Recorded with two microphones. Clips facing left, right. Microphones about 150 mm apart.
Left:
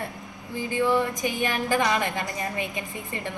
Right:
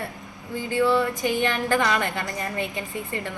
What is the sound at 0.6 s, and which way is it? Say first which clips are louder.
A woman's voice: right 2 dB; 15° left (ahead or behind).